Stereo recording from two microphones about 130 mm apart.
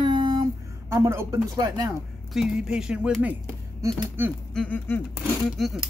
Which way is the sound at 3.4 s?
20° right (ahead or behind).